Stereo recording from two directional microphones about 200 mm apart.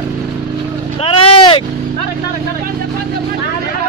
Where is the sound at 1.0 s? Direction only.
25° left (ahead or behind).